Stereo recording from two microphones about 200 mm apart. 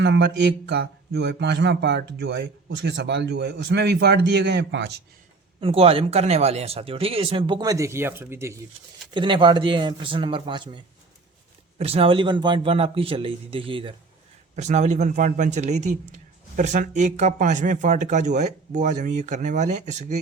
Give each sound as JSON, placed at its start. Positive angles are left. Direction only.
{"t": 0.0, "sound": "speech", "side_deg": -60}
{"t": 5.5, "sound": "speech", "side_deg": -30}
{"t": 9.1, "sound": "speech", "side_deg": -25}
{"t": 14.5, "sound": "speech", "side_deg": -35}